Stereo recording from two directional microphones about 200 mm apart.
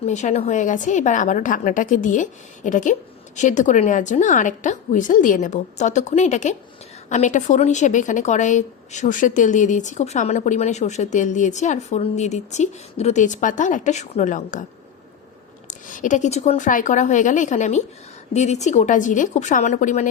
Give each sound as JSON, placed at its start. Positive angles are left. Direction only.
{"t": 0.0, "sound": "a woman's voice", "side_deg": 35}
{"t": 15.6, "sound": "a woman's voice", "side_deg": 40}